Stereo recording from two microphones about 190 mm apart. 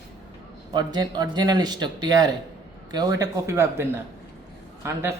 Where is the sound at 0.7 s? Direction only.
20° right (ahead or behind).